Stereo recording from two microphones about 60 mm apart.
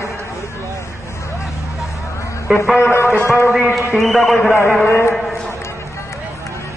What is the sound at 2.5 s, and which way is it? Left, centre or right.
Speech, centre.